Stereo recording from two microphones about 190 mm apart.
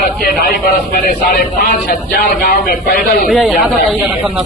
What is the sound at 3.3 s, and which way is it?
Speech, centre (ahead or behind).